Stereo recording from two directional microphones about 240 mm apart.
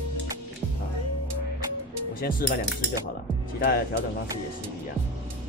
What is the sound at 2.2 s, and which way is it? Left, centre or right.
Speech, left.